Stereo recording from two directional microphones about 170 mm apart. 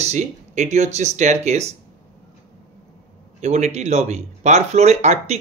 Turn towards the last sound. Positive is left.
turn(degrees=-40)  # may be behind; listen again after turning